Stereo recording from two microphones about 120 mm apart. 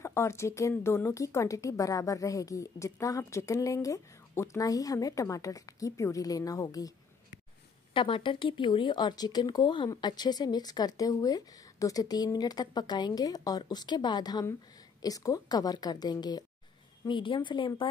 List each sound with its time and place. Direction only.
0.0 s speech: 20° left (ahead or behind)
7.9 s speech: 45° left (ahead or behind)